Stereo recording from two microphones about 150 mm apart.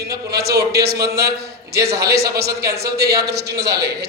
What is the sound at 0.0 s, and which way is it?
A man's voice, 90° right.